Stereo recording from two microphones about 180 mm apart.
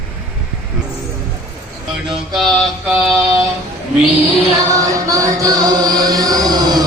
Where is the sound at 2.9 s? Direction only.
10° right (ahead or behind).